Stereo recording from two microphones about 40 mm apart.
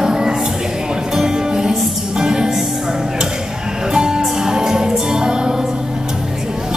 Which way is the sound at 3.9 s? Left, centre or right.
Centre.